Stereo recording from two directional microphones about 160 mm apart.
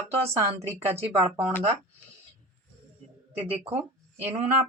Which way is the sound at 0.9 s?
40° right (ahead or behind).